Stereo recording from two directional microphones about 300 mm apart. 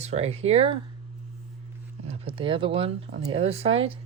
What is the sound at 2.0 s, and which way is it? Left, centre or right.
Speech, centre.